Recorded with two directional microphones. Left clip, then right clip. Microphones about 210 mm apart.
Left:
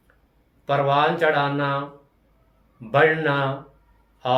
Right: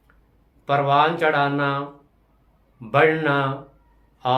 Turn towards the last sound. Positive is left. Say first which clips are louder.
# even
turn(degrees=-20)  # may be behind; listen again after turning